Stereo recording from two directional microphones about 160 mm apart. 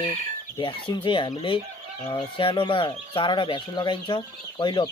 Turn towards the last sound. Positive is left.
turn(degrees=30)  # may be behind; listen again after turning